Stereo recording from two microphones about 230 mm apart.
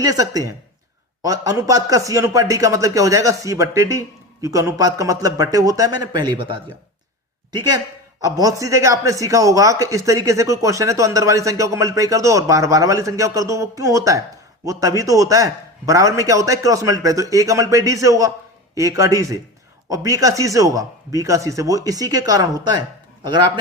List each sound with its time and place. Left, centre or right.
0.0 s a man's voice: centre